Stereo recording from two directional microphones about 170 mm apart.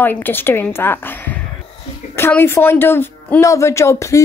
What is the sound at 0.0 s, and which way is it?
A woman's voice, 10° left (ahead or behind).